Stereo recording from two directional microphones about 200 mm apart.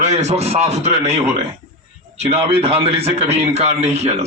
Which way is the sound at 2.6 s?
30° right (ahead or behind).